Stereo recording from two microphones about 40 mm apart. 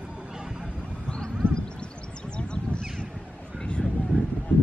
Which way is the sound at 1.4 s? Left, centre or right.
Right.